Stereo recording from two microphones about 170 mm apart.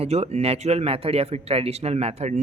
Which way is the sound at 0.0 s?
40° right (ahead or behind).